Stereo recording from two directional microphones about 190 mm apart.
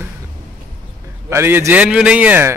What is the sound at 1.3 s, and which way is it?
A man's voice, 10° right (ahead or behind).